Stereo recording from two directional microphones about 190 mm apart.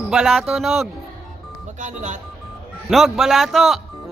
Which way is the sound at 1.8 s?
40° right (ahead or behind).